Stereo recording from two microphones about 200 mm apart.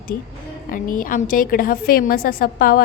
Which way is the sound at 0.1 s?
45° left (ahead or behind).